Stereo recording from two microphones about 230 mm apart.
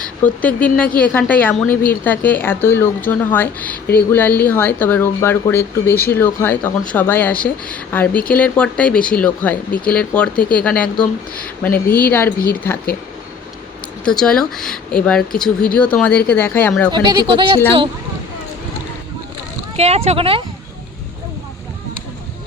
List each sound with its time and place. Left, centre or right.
0.0 s speech: centre
14.0 s speech: centre
16.9 s speech: centre
19.7 s speech: right